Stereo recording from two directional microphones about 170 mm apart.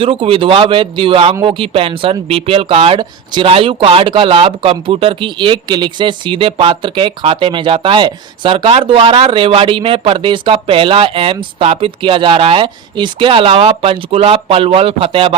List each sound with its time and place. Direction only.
0.0 s speech: 35° right (ahead or behind)